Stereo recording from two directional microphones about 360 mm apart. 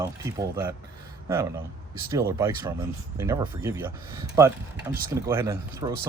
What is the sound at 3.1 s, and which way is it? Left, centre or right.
Speech, centre.